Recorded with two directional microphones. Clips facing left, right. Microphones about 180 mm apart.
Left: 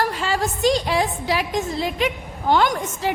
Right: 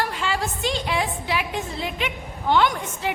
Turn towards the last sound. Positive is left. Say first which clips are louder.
# left 1 dB
turn(degrees=40)  # may be behind; listen again after turning